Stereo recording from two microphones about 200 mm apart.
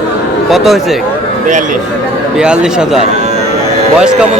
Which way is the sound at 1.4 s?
40° right (ahead or behind).